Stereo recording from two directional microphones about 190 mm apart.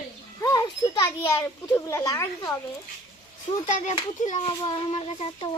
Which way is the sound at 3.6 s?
40° left (ahead or behind).